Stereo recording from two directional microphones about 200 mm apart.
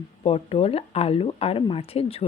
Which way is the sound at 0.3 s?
30° left (ahead or behind).